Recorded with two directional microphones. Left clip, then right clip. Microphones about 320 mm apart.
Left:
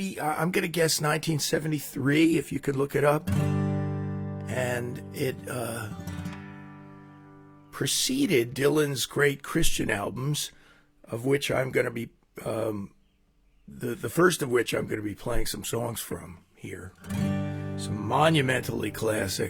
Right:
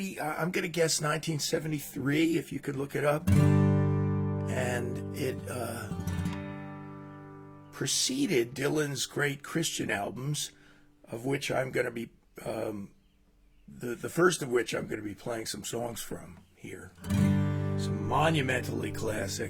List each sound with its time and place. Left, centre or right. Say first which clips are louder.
0.0 s speech: left 4 dB; left
3.3 s music: right 3 dB; centre
4.4 s speech: left 4 dB; left
6.2 s music: right 3 dB; centre
7.7 s speech: left 3 dB; left
17.1 s music: right 1 dB; centre
18.0 s speech: left 5 dB; left